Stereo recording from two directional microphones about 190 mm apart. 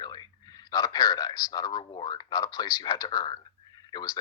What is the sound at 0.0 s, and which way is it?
Speech, 20° left (ahead or behind).